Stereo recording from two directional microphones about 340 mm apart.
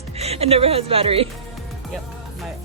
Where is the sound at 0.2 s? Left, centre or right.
Centre.